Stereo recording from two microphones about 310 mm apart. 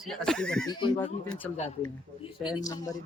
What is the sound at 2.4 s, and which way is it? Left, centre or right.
Speech, centre.